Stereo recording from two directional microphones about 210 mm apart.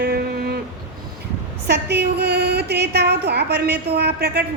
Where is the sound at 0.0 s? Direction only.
50° right (ahead or behind).